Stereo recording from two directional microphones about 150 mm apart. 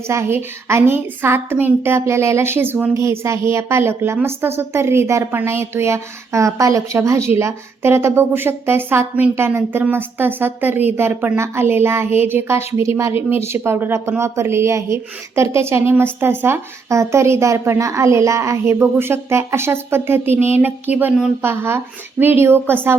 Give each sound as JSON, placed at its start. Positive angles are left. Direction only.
{"t": 0.1, "sound": "a woman's voice", "side_deg": -15}